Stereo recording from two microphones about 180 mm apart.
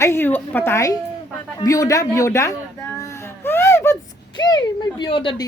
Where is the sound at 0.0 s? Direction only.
15° left (ahead or behind).